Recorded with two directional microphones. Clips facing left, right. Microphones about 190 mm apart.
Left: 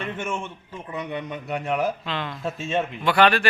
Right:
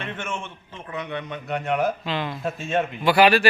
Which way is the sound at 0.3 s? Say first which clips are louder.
Left 2 dB; 15° left (ahead or behind).